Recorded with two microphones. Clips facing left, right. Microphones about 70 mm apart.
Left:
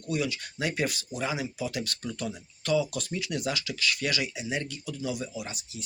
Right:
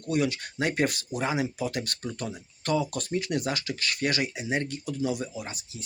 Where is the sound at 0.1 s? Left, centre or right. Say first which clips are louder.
Right 4 dB; right.